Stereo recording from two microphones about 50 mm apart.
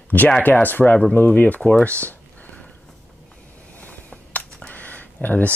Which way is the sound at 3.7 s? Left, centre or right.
Left.